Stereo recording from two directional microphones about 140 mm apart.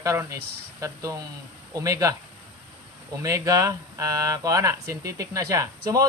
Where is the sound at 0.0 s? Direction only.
25° right (ahead or behind).